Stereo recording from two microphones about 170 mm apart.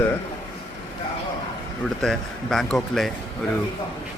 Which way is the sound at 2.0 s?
5° left (ahead or behind).